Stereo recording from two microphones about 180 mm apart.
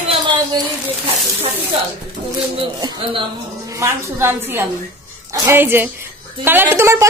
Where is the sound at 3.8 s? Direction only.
15° right (ahead or behind).